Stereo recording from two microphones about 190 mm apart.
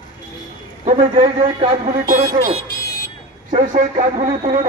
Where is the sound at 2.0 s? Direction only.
50° right (ahead or behind).